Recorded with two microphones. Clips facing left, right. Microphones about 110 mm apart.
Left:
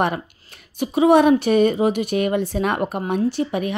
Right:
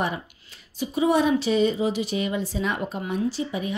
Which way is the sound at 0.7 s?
70° left (ahead or behind).